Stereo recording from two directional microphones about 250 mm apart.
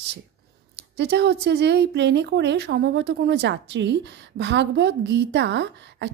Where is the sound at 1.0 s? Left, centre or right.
Right.